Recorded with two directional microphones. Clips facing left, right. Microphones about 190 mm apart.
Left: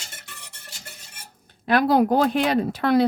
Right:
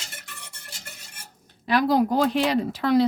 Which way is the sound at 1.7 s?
60° left (ahead or behind).